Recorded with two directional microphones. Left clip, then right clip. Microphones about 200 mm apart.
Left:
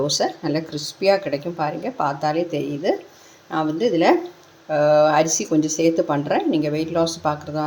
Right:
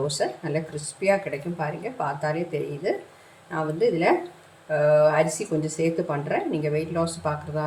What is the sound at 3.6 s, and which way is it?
Speech, 35° left (ahead or behind).